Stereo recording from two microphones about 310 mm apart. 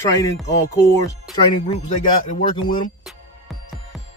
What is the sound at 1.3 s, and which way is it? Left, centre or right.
Speech, centre.